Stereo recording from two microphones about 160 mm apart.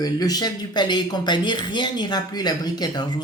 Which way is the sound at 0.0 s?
25° left (ahead or behind).